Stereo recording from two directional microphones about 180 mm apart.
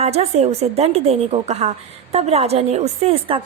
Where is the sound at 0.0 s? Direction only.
35° right (ahead or behind).